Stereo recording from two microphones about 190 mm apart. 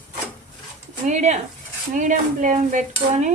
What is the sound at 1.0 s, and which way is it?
Stir, 35° right (ahead or behind).